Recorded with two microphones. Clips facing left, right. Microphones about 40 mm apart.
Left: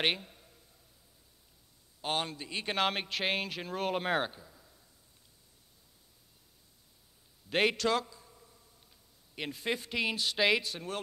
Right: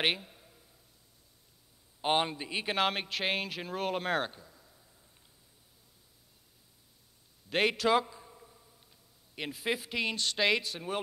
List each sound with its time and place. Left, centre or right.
0.0 s a sound: centre
2.0 s a man's voice: right
2.6 s speech: centre
7.4 s a man's voice: centre
8.1 s a sound: right
9.3 s speech: centre